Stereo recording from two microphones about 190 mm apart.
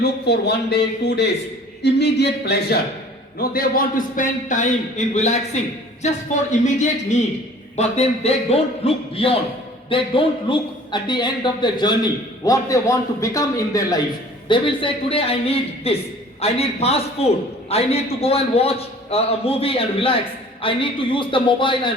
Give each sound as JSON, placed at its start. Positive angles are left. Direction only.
{"t": 0.0, "sound": "a man's voice", "side_deg": 60}